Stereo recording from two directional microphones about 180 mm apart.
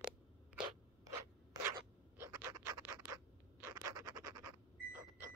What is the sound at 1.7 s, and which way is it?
Scratch, 15° right (ahead or behind).